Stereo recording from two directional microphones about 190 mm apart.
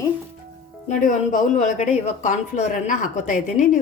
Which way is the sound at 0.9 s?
40° left (ahead or behind).